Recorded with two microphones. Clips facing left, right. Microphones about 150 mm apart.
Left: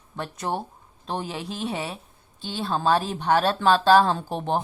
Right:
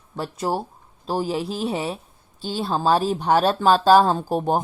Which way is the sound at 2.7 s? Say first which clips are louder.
Right 2 dB; 35° right (ahead or behind).